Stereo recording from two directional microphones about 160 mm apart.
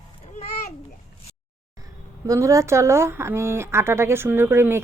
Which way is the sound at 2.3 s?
20° right (ahead or behind).